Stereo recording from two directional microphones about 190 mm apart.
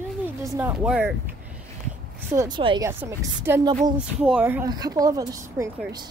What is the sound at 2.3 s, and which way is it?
Speech, 20° right (ahead or behind).